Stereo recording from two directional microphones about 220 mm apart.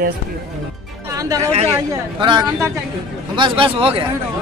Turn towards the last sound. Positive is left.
turn(degrees=-25)  # may be behind; listen again after turning